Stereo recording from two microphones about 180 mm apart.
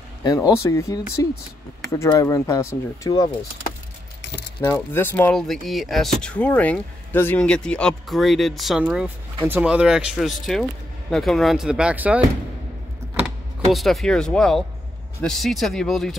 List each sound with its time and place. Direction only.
0.2 s speech: 20° left (ahead or behind)
4.2 s keys jangling: 70° left (ahead or behind)
4.7 s speech: 10° left (ahead or behind); by 12.2 s 10° right (ahead or behind)
13.2 s speech: centre (ahead or behind)